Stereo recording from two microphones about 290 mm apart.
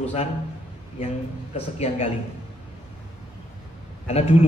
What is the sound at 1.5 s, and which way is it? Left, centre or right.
Speech, left.